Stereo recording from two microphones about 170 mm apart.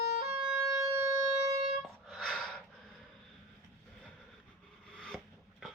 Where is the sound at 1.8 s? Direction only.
Centre (ahead or behind).